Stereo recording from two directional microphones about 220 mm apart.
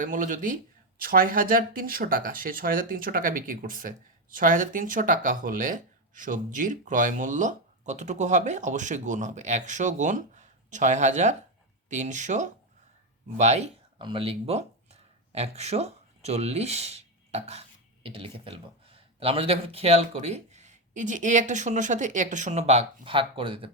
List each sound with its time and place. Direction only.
0.0 s speech: 35° right (ahead or behind)